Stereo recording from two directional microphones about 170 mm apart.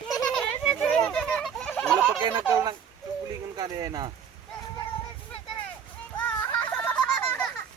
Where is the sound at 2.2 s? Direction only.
25° right (ahead or behind).